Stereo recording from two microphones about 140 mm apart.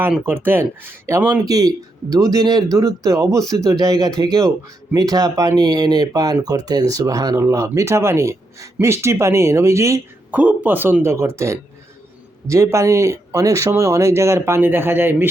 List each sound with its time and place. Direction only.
0.1 s speech: 15° right (ahead or behind)